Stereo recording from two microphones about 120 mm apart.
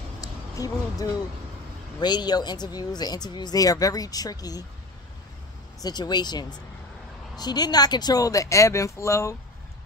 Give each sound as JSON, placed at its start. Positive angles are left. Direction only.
{"t": 0.2, "sound": "a sound", "side_deg": 30}
{"t": 2.0, "sound": "speech", "side_deg": 35}
{"t": 5.8, "sound": "speech", "side_deg": 35}